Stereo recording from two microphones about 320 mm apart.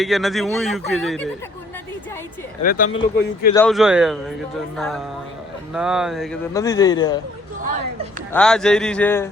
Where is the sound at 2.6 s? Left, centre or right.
Left.